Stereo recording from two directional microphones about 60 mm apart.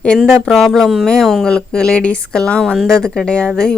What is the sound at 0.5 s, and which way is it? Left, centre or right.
A woman's voice, centre.